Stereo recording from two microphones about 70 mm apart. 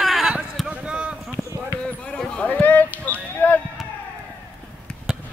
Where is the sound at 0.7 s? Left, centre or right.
Centre.